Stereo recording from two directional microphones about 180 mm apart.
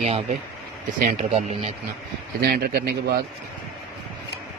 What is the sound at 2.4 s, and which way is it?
Speech, 55° right (ahead or behind).